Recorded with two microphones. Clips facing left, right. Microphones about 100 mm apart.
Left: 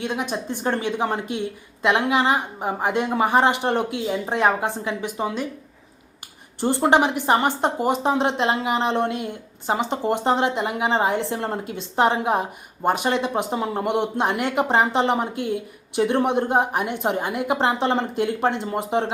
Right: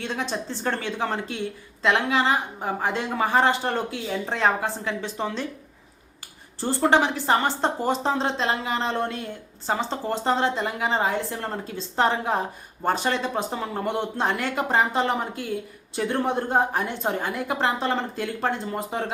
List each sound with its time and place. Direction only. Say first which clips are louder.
0.0 s speech: left 3 dB; 15° left (ahead or behind)
6.6 s a woman's voice: left 2 dB; 20° left (ahead or behind)